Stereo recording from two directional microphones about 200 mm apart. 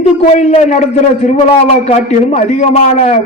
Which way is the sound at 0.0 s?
35° left (ahead or behind).